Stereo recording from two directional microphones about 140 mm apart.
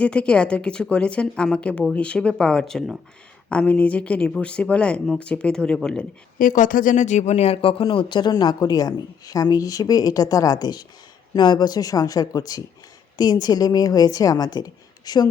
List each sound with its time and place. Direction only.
0.0 s speech: 10° left (ahead or behind)
6.4 s speech: 70° left (ahead or behind); by 15.3 s 30° left (ahead or behind)